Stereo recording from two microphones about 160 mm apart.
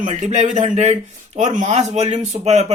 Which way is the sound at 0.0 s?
50° right (ahead or behind).